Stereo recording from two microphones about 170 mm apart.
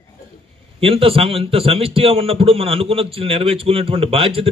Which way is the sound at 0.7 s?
35° right (ahead or behind).